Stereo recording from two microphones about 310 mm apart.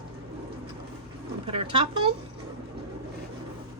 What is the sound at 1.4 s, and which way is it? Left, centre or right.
Speech, centre.